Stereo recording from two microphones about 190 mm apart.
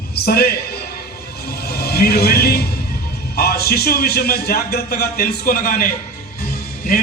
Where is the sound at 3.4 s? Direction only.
55° left (ahead or behind).